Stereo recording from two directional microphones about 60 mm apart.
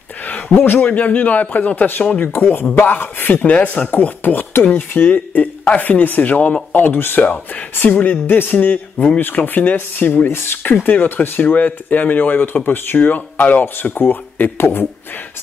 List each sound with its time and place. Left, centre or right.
0.2 s a man's voice: left
7.2 s speech: left
8.9 s speech: left
10.3 s speech: left
10.6 s speech: left